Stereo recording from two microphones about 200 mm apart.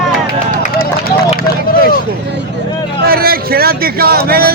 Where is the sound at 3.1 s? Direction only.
50° right (ahead or behind).